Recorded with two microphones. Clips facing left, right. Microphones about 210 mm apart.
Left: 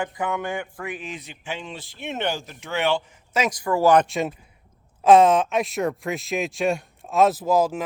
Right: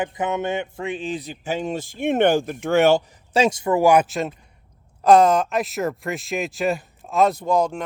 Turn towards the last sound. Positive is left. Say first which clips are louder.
# even
turn(degrees=5)  # may be behind; listen again after turning